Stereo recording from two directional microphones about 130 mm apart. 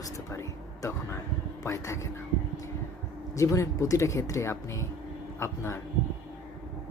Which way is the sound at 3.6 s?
25° left (ahead or behind).